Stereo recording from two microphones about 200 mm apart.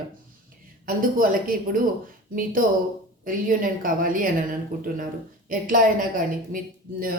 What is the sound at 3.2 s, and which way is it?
Speech, 45° right (ahead or behind).